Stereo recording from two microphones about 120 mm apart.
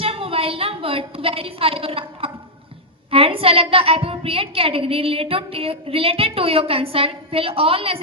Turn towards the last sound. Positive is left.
turn(degrees=-50)  # may be behind; listen again after turning